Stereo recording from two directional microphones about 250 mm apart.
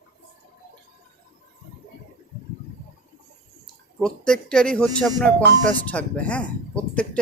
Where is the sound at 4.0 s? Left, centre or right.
Centre.